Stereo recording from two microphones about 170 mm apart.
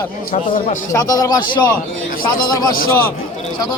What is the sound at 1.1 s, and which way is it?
Speech, 20° left (ahead or behind).